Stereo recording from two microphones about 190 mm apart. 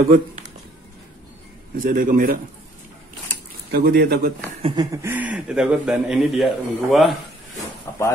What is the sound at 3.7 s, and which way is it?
Speech, 50° right (ahead or behind).